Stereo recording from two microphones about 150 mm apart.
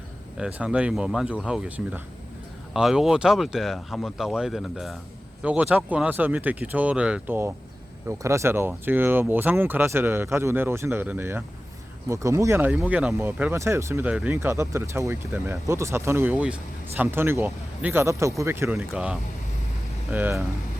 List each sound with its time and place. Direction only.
0.3 s speech: 5° right (ahead or behind)
18.8 s speech: 5° right (ahead or behind)